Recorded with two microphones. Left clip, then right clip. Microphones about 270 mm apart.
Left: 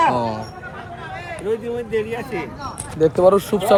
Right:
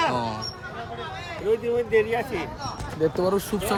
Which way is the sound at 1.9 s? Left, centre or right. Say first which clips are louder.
Right 1 dB; centre.